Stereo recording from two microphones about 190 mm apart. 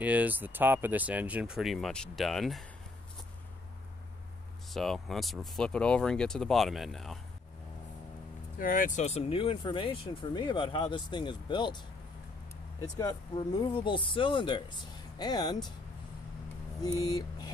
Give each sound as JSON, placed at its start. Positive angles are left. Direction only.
{"t": 0.0, "sound": "speech", "side_deg": -10}
{"t": 4.6, "sound": "speech", "side_deg": 0}
{"t": 8.5, "sound": "speech", "side_deg": 45}
{"t": 13.0, "sound": "speech", "side_deg": 20}